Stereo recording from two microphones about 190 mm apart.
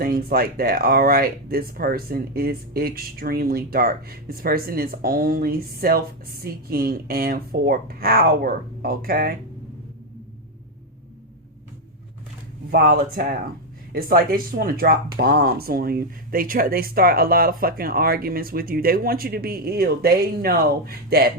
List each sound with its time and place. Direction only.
0.0 s speech: 50° right (ahead or behind)
12.7 s speech: 50° right (ahead or behind)